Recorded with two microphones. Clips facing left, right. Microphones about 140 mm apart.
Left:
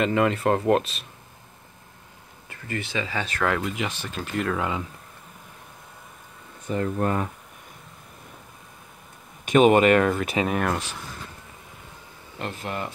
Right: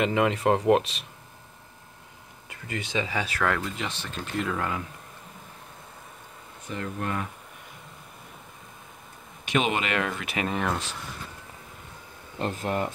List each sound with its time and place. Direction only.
0.0 s speech: 15° right (ahead or behind)
2.5 s speech: 15° right (ahead or behind)
3.4 s speech: 10° left (ahead or behind)
4.6 s speech: 20° left (ahead or behind)
6.7 s speech: 40° left (ahead or behind)
9.5 s speech: 45° left (ahead or behind)
10.5 s speech: 5° left (ahead or behind)
12.4 s speech: 35° right (ahead or behind)